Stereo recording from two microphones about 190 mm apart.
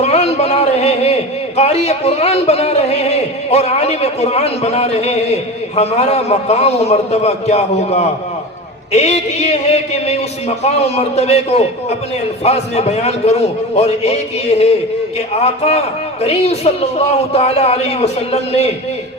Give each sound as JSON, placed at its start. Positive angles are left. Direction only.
{"t": 0.0, "sound": "a man's voice", "side_deg": 35}